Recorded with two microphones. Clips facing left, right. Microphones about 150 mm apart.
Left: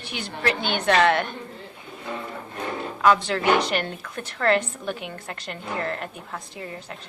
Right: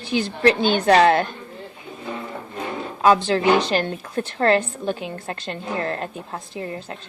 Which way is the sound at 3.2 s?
30° right (ahead or behind).